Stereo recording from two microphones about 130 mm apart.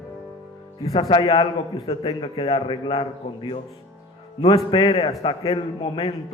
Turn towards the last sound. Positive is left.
turn(degrees=50)  # may be behind; listen again after turning